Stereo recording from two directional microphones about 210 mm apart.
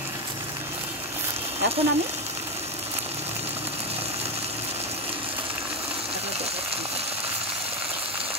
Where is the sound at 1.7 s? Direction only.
30° right (ahead or behind).